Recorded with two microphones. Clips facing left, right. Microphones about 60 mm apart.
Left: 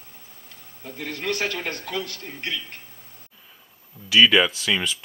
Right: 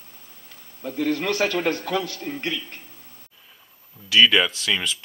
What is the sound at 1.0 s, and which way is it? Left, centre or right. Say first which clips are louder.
A man's voice: right 4 dB; right.